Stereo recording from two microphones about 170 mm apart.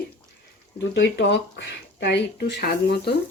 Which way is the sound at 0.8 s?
90° left.